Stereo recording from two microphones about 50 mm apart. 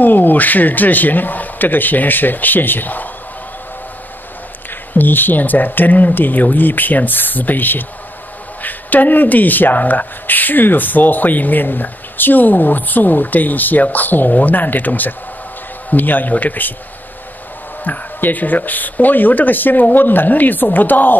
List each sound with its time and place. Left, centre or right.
0.0 s speech: left
4.6 s speech: left
17.8 s speech: left